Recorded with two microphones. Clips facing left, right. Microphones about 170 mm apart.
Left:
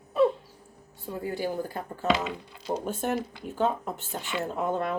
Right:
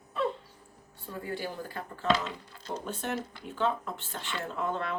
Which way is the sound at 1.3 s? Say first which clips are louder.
Left 6 dB; 15° left (ahead or behind).